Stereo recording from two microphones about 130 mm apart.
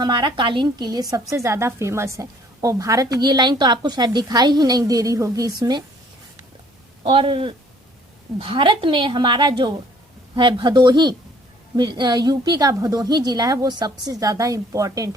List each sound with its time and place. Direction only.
0.0 s a woman's voice: 35° right (ahead or behind)
7.0 s a woman's voice: 45° right (ahead or behind); by 15.1 s 25° right (ahead or behind)